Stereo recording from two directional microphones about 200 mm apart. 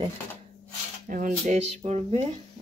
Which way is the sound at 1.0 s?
45° right (ahead or behind).